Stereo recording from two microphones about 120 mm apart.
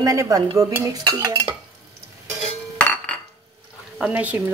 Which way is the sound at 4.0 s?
10° right (ahead or behind).